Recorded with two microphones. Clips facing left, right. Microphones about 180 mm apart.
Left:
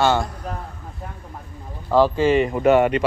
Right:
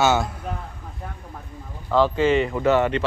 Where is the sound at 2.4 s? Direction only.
15° left (ahead or behind).